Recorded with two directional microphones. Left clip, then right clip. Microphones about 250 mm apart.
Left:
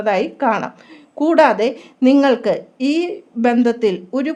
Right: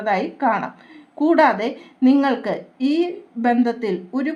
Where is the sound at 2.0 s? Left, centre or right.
Left.